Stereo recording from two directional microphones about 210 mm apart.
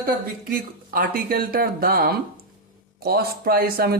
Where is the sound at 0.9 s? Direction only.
40° right (ahead or behind).